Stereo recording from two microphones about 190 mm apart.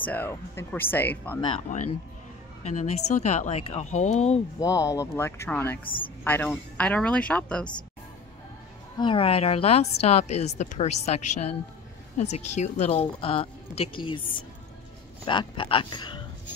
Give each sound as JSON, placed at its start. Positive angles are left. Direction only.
{"t": 0.0, "sound": "speech", "side_deg": 10}
{"t": 2.6, "sound": "a woman's voice", "side_deg": 40}
{"t": 4.6, "sound": "speech", "side_deg": 15}
{"t": 5.9, "sound": "speech", "side_deg": 25}
{"t": 6.2, "sound": "speech", "side_deg": 10}
{"t": 8.9, "sound": "a woman's voice", "side_deg": 25}
{"t": 15.2, "sound": "speech", "side_deg": 25}